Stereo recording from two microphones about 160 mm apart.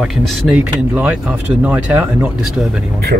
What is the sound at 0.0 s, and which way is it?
Speech, 5° right (ahead or behind).